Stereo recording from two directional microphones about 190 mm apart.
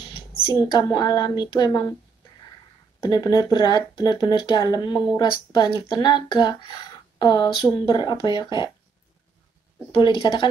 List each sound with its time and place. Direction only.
0.6 s speech: 20° left (ahead or behind)
3.0 s speech: 20° left (ahead or behind)
9.9 s speech: 25° left (ahead or behind)